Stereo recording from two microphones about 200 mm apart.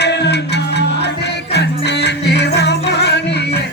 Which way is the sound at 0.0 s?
60° left (ahead or behind).